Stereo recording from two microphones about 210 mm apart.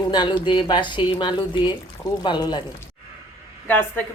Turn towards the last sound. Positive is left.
turn(degrees=10)  # may be behind; listen again after turning